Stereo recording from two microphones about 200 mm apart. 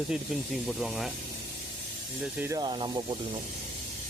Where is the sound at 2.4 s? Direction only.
15° right (ahead or behind).